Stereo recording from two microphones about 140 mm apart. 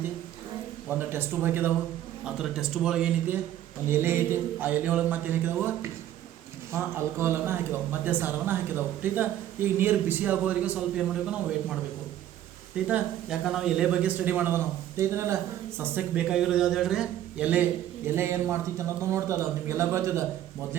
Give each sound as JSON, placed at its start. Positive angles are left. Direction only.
{"t": 0.9, "sound": "speech", "side_deg": -15}
{"t": 2.2, "sound": "speech", "side_deg": -5}
{"t": 12.9, "sound": "speech", "side_deg": 0}